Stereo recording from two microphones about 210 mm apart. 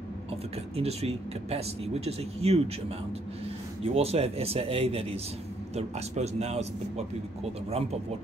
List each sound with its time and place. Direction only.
0.3 s speech: 30° right (ahead or behind)
3.8 s speech: 30° right (ahead or behind)